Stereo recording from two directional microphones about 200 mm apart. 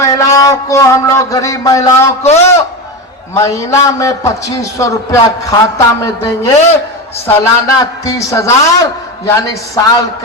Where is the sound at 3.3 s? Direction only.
15° left (ahead or behind).